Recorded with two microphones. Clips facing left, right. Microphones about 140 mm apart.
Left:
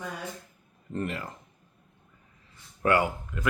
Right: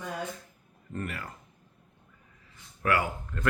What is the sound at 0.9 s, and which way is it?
Speech, 25° left (ahead or behind).